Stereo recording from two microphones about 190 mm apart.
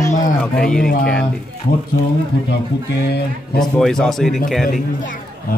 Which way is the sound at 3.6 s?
5° left (ahead or behind).